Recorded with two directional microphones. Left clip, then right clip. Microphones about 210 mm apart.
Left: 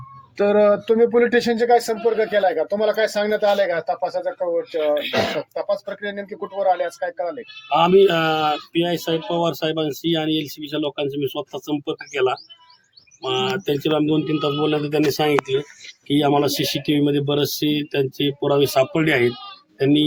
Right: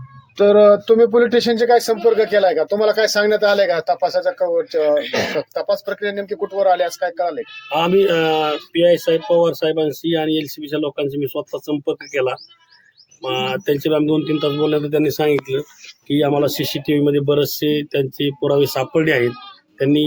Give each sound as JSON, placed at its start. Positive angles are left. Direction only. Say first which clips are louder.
{"t": 0.3, "sound": "speech", "louder": "right 5 dB", "side_deg": -25}
{"t": 7.7, "sound": "a man's voice", "louder": "left 1 dB", "side_deg": -5}